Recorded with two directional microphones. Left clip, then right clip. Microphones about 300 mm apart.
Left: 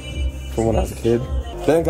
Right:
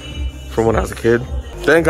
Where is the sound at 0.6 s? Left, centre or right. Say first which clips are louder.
Right 5 dB; centre.